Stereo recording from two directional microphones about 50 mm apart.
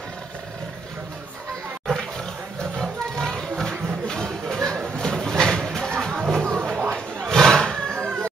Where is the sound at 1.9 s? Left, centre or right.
Centre.